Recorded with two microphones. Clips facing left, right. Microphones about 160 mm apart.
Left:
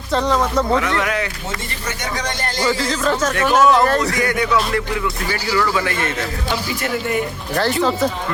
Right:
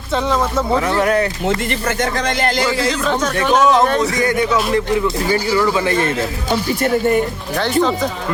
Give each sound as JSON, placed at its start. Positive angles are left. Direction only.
{"t": 0.1, "sound": "speech", "side_deg": 0}
{"t": 0.8, "sound": "speech", "side_deg": -35}
{"t": 2.6, "sound": "speech", "side_deg": 0}
{"t": 4.2, "sound": "speech", "side_deg": -20}
{"t": 6.5, "sound": "speech", "side_deg": -45}
{"t": 7.5, "sound": "speech", "side_deg": 0}